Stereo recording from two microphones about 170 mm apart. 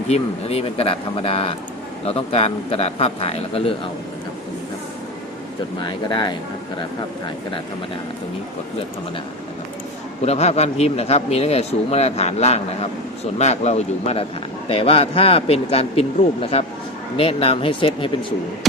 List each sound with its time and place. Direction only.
0.1 s a man's voice: 35° left (ahead or behind)
5.8 s speech: 25° left (ahead or behind)
10.2 s a man's voice: 40° left (ahead or behind)
18.6 s a sound: centre (ahead or behind)